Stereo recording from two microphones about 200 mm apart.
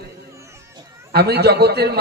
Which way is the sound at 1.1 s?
55° right (ahead or behind).